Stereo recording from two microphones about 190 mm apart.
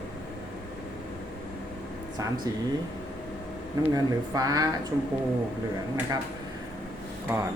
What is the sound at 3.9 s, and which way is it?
Speech, 20° right (ahead or behind).